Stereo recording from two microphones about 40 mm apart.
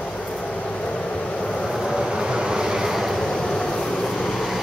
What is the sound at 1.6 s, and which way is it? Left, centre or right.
Vehicle, centre.